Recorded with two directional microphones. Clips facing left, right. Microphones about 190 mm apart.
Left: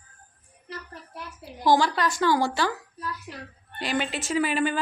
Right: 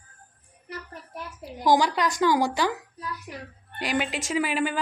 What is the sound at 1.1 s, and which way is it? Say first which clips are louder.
A woman's voice: right 4 dB; 15° right (ahead or behind).